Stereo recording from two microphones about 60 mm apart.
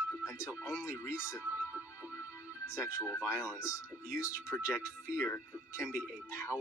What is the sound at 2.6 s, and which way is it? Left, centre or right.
Speech, left.